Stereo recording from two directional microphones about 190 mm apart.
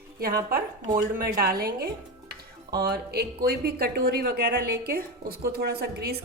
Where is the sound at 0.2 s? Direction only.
50° right (ahead or behind).